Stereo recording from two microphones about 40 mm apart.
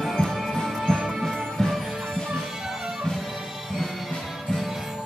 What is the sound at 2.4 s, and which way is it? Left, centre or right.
Music, centre.